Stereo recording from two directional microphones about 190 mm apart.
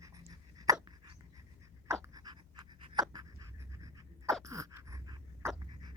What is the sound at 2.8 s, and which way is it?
Pant, 20° right (ahead or behind).